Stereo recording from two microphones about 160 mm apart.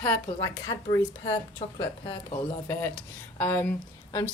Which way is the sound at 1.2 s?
30° left (ahead or behind).